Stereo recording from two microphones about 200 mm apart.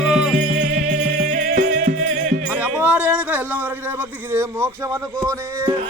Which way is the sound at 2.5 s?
5° right (ahead or behind).